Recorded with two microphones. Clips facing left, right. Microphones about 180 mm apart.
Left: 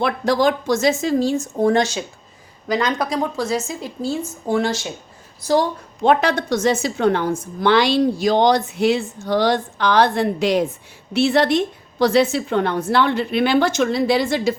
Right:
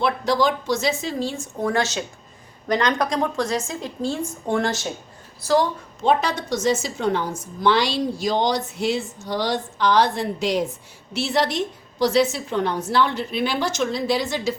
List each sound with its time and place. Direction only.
0.0 s speech: 50° left (ahead or behind)
1.6 s a woman's voice: 20° left (ahead or behind); by 4.9 s centre (ahead or behind)
6.0 s a woman's voice: 60° left (ahead or behind)